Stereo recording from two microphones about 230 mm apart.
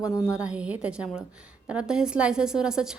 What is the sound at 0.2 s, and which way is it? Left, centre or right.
A woman's voice, centre.